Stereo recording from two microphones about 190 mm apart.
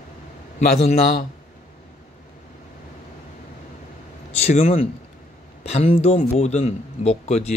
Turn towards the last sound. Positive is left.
turn(degrees=35)  # may be behind; listen again after turning